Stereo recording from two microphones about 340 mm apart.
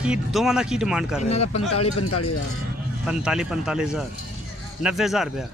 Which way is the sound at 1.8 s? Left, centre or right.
Left.